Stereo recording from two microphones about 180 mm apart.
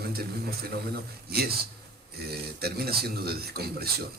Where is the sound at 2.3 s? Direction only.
60° right (ahead or behind).